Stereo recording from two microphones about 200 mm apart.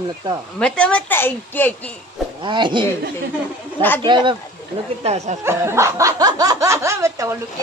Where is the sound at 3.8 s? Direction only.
10° left (ahead or behind).